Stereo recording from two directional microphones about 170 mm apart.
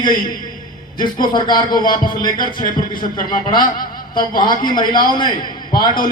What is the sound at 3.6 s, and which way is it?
Speech, 55° left (ahead or behind).